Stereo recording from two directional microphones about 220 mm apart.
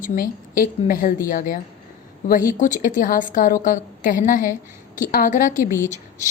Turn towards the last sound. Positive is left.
turn(degrees=35)  # may be behind; listen again after turning